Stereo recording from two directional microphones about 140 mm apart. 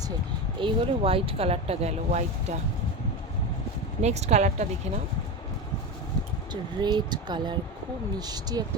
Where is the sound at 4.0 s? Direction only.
50° right (ahead or behind).